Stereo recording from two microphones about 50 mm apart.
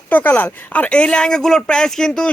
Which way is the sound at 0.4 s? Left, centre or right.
Left.